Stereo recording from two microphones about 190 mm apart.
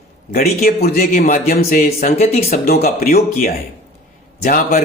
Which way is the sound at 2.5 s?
55° left (ahead or behind).